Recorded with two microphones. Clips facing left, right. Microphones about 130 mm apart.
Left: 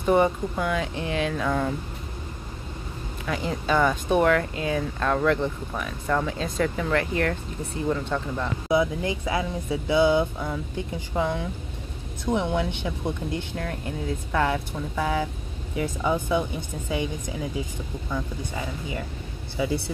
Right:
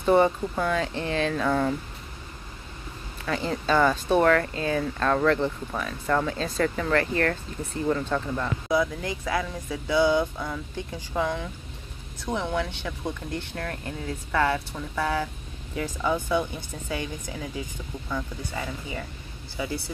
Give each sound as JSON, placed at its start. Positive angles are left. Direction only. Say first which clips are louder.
{"t": 0.0, "sound": "speech", "louder": "right 1 dB", "side_deg": 5}
{"t": 1.5, "sound": "speech", "louder": "right 1 dB", "side_deg": 0}
{"t": 3.3, "sound": "speech", "louder": "even", "side_deg": 10}
{"t": 8.6, "sound": "speech", "louder": "left 3 dB", "side_deg": 20}
{"t": 18.1, "sound": "speech", "louder": "left 1 dB", "side_deg": 10}
{"t": 19.5, "sound": "speech", "louder": "left 5 dB", "side_deg": 25}